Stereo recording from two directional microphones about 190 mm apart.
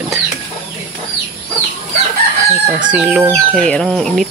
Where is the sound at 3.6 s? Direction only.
Centre (ahead or behind).